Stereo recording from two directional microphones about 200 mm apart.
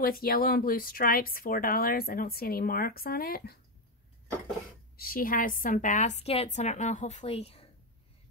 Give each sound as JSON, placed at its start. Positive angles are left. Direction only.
{"t": 0.0, "sound": "a woman's voice", "side_deg": 45}
{"t": 4.9, "sound": "a woman's voice", "side_deg": 45}